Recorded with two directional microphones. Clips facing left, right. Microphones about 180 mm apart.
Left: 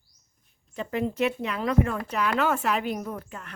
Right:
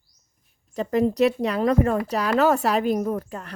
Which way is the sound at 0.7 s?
40° right (ahead or behind).